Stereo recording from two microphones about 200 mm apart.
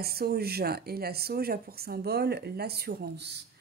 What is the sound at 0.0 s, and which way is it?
Speech, 50° right (ahead or behind).